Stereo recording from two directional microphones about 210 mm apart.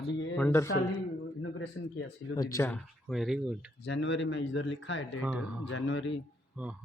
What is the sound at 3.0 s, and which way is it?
Speech, centre (ahead or behind).